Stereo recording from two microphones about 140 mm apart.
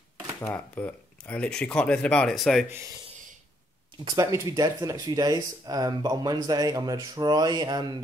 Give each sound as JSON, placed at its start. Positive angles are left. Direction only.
{"t": 0.4, "sound": "speech", "side_deg": 15}
{"t": 4.2, "sound": "speech", "side_deg": -25}